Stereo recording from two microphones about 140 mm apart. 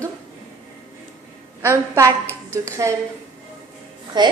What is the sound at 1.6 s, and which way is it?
Speech, 20° right (ahead or behind).